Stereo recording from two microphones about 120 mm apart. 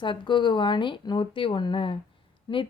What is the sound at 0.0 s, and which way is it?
A woman's voice, 40° left (ahead or behind).